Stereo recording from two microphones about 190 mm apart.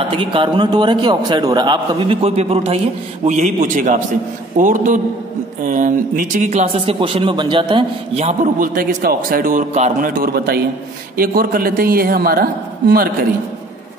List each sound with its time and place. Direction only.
0.1 s a man's voice: 25° right (ahead or behind); by 13.3 s 50° right (ahead or behind)